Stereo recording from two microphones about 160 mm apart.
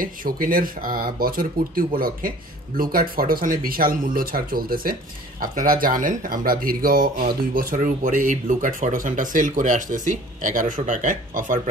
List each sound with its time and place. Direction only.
0.0 s speech: 60° right (ahead or behind)